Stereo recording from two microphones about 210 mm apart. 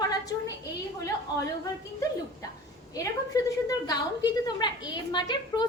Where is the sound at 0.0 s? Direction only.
15° left (ahead or behind).